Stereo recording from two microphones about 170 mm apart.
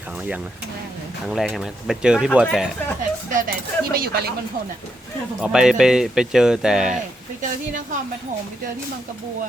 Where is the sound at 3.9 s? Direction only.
65° right (ahead or behind).